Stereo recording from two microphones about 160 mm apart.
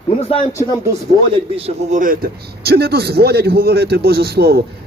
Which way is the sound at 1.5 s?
40° right (ahead or behind).